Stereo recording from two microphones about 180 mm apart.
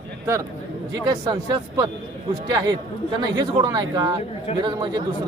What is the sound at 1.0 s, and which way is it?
A man's voice, 20° right (ahead or behind).